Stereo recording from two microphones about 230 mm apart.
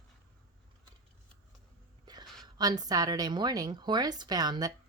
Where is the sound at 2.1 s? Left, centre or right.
Centre.